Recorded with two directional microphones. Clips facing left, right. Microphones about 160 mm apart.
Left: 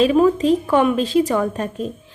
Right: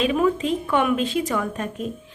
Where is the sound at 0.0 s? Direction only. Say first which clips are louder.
Left 6 dB; 35° left (ahead or behind).